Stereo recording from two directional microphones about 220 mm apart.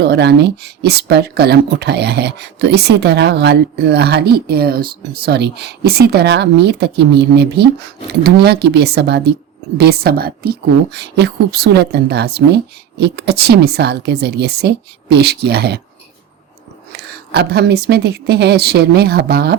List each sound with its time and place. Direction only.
0.0 s speech: 50° right (ahead or behind)
16.9 s speech: 45° right (ahead or behind)